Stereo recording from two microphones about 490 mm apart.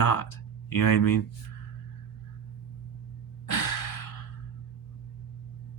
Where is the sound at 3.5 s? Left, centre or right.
Left.